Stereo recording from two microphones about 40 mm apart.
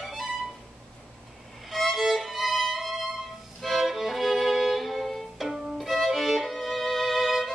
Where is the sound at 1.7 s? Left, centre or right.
Centre.